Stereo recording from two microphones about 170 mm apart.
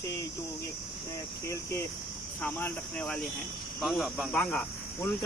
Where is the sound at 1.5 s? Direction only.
15° left (ahead or behind).